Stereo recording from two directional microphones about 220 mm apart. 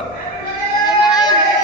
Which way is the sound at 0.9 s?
20° left (ahead or behind).